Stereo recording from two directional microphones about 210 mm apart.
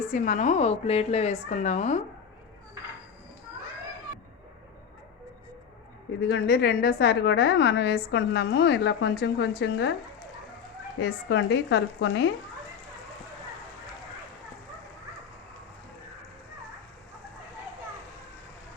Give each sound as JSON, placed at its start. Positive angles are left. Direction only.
{"t": 0.1, "sound": "a woman's voice", "side_deg": 35}
{"t": 6.1, "sound": "a woman's voice", "side_deg": 50}
{"t": 11.3, "sound": "speech", "side_deg": 55}